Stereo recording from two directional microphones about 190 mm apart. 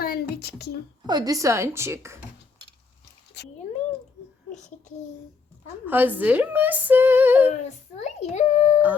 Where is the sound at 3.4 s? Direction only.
65° left (ahead or behind).